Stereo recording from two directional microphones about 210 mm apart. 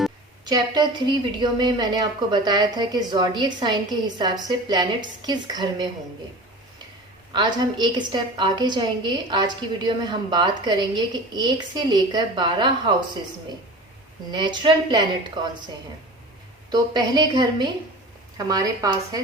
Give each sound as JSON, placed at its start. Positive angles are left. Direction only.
{"t": 0.4, "sound": "a woman's voice", "side_deg": -20}
{"t": 7.3, "sound": "a woman's voice", "side_deg": -20}
{"t": 14.3, "sound": "a woman's voice", "side_deg": -20}
{"t": 16.6, "sound": "a woman's voice", "side_deg": -20}